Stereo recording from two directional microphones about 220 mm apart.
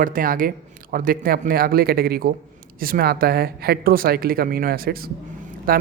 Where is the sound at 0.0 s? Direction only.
40° right (ahead or behind).